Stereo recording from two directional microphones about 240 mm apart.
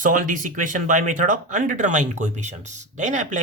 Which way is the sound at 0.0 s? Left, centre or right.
Right.